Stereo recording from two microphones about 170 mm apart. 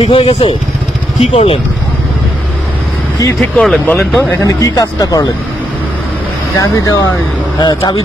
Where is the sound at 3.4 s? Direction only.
5° left (ahead or behind).